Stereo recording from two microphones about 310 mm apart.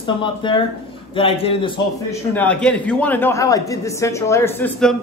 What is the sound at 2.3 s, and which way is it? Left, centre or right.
A man's voice, centre.